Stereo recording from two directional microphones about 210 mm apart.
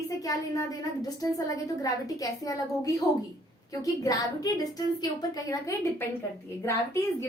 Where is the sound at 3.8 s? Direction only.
15° left (ahead or behind).